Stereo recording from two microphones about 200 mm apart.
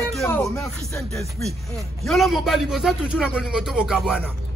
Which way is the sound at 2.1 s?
Centre (ahead or behind).